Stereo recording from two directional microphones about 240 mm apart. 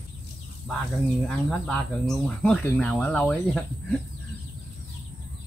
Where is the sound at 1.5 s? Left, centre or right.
Centre.